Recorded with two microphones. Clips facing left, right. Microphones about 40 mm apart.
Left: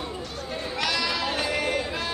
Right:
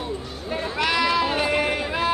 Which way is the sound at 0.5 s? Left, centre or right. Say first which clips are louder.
Right 5 dB; centre.